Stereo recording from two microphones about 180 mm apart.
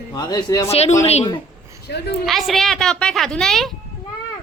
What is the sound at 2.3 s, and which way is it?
Speech, centre (ahead or behind).